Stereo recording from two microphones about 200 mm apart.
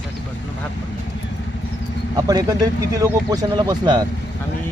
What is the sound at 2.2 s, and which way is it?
Speech, 20° right (ahead or behind).